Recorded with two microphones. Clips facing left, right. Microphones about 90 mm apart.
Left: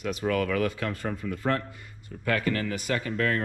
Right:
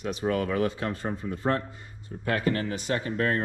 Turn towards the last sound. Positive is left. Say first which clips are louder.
# even
turn(degrees=-30)  # may be behind; listen again after turning